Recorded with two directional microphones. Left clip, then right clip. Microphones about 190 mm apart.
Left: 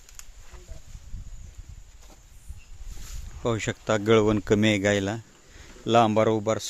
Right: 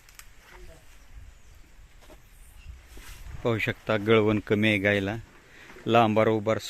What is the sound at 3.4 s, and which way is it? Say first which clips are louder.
Speech: even; 5° left (ahead or behind).